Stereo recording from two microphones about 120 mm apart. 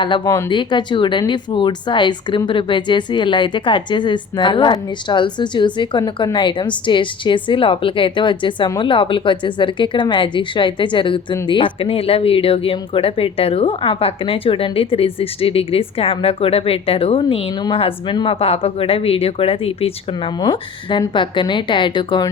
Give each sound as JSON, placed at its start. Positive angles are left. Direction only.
{"t": 0.3, "sound": "speech", "side_deg": 25}
{"t": 0.5, "sound": "speech", "side_deg": 40}